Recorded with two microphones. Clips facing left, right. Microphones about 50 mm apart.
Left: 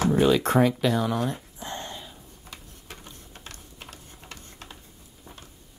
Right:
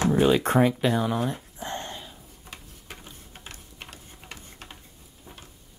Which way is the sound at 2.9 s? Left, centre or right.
Centre.